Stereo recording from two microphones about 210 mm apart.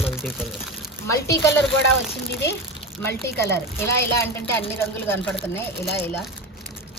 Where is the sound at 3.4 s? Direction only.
10° left (ahead or behind).